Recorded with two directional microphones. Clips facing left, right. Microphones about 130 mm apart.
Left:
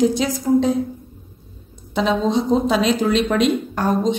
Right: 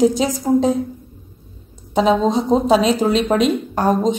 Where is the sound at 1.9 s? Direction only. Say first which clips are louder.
Right 3 dB; 40° right (ahead or behind).